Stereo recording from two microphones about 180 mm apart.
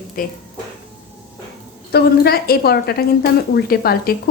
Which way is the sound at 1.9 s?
60° left (ahead or behind).